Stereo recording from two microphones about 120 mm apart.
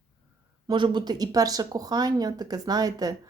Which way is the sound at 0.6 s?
40° right (ahead or behind).